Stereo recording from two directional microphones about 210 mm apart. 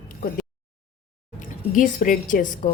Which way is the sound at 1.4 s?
40° left (ahead or behind).